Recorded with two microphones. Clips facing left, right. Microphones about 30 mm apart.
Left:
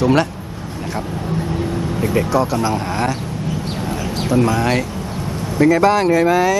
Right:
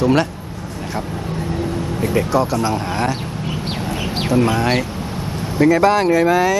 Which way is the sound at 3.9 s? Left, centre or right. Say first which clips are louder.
Even; right.